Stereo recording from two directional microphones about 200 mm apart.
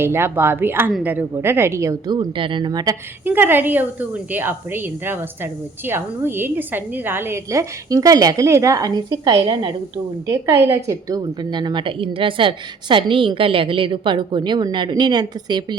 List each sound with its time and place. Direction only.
0.0 s a woman's voice: 10° right (ahead or behind)
3.2 s a woman's voice: 10° right (ahead or behind)